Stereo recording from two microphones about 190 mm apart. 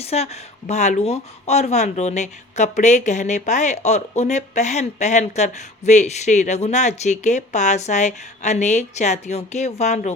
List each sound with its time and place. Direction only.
0.0 s speech: 35° left (ahead or behind)